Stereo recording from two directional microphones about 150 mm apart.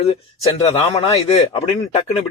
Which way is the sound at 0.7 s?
45° left (ahead or behind).